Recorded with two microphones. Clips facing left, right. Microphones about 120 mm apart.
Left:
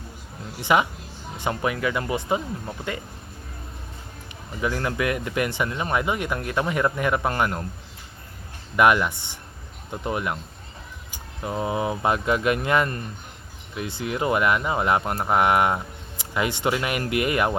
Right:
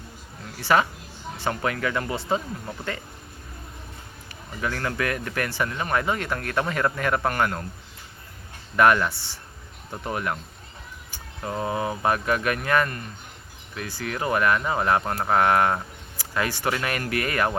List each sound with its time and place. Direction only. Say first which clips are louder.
0.6 s speech: even; 15° left (ahead or behind)
4.6 s speech: left 2 dB; 15° left (ahead or behind)
8.7 s speech: even; 15° left (ahead or behind)